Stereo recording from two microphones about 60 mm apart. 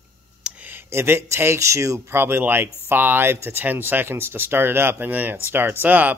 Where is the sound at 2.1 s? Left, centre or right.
Right.